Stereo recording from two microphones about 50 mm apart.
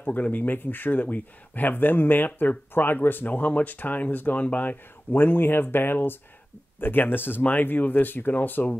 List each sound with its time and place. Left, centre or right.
0.0 s speech: left